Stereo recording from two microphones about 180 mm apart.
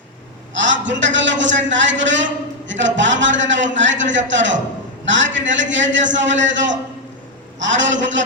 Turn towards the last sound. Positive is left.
turn(degrees=-90)